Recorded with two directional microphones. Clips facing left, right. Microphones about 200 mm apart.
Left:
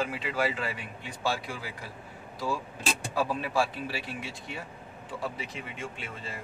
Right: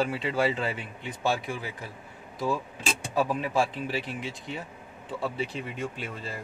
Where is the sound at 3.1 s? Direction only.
20° right (ahead or behind).